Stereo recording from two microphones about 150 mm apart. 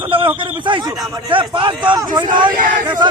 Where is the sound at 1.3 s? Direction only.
35° right (ahead or behind).